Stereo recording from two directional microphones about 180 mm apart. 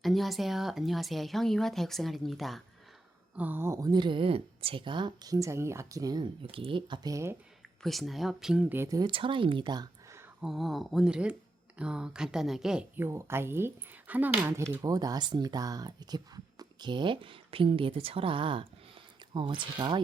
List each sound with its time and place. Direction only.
0.0 s speech: centre (ahead or behind)
3.3 s a woman's voice: 10° right (ahead or behind)
7.8 s speech: centre (ahead or behind); by 10.2 s 20° right (ahead or behind)
10.4 s a woman's voice: centre (ahead or behind); by 20.0 s 25° right (ahead or behind)